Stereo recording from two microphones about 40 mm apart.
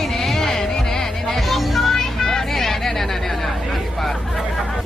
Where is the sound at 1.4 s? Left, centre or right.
Centre.